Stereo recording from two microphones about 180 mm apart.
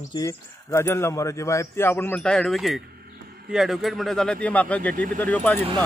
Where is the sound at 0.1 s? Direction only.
20° left (ahead or behind).